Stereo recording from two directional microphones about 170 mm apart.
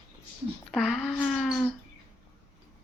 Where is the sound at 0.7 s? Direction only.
Centre (ahead or behind).